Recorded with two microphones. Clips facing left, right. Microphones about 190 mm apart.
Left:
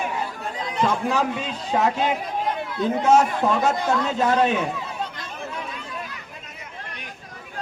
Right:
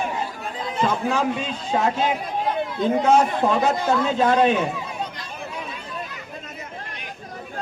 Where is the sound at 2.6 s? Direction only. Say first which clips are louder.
Right 5 dB; 20° right (ahead or behind).